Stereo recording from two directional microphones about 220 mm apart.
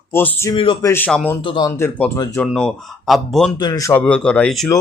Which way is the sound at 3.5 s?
15° left (ahead or behind).